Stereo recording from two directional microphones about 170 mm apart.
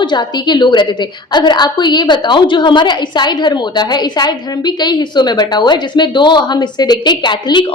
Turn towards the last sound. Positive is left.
turn(degrees=25)  # may be behind; listen again after turning